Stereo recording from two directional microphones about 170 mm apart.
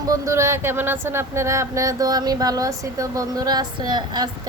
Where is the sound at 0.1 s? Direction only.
15° right (ahead or behind).